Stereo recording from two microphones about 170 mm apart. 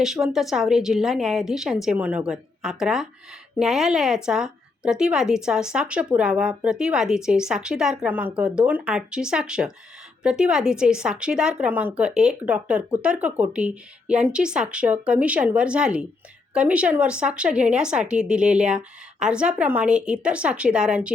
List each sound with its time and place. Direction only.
0.0 s speech: centre (ahead or behind)